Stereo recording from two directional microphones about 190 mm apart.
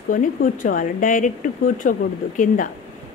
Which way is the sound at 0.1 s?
45° left (ahead or behind).